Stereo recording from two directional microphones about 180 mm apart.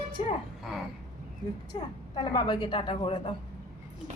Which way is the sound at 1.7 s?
25° left (ahead or behind).